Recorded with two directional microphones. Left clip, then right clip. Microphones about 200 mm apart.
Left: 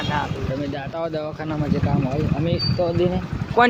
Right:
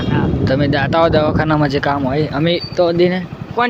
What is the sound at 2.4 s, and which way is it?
Speech, 60° right (ahead or behind).